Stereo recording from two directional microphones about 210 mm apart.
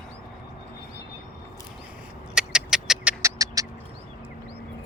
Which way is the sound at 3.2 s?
15° right (ahead or behind).